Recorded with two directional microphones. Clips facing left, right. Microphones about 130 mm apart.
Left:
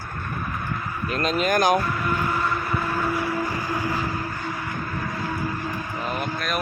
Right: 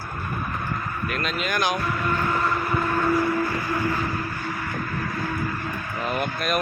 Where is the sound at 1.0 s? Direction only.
35° left (ahead or behind).